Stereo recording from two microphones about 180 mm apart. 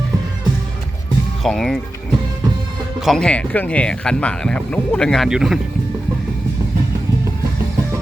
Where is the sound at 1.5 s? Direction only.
Centre (ahead or behind).